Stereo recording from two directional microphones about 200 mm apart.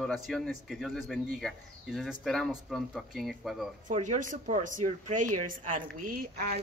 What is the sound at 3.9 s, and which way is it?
A woman's voice, 40° right (ahead or behind).